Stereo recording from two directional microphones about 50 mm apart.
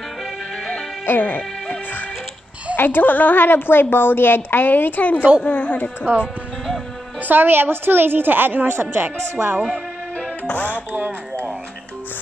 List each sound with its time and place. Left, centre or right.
1.0 s music: left
2.7 s a woman's voice: left
6.1 s speech: right
7.2 s a woman's voice: right
10.5 s speech: left
10.9 s a woman's voice: right